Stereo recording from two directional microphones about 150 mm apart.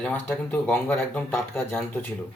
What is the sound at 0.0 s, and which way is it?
Speech, 10° left (ahead or behind).